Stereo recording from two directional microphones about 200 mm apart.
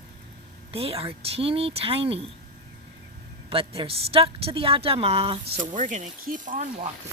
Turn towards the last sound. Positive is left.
turn(degrees=-40)  # may be behind; listen again after turning